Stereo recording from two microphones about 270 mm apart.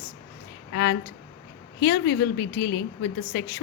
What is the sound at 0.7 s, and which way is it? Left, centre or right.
A woman's voice, left.